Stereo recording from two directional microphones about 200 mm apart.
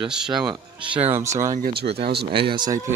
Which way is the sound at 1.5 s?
50° right (ahead or behind).